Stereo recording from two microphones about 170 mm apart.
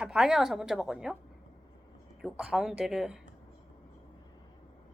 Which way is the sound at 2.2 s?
5° right (ahead or behind).